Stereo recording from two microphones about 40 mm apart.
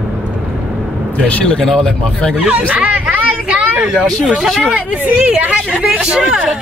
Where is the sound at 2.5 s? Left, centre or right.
Right.